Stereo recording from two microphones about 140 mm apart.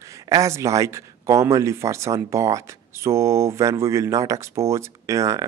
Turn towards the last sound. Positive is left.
turn(degrees=-20)  # may be behind; listen again after turning